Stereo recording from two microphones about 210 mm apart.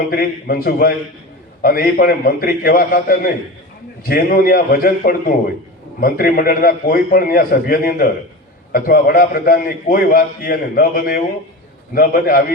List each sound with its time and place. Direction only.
0.1 s a man's voice: 45° left (ahead or behind)